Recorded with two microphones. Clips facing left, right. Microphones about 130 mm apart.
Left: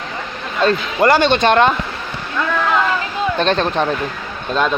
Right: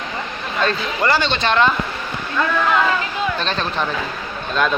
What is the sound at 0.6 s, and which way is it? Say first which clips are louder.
Speech: left 6 dB; 45° left (ahead or behind).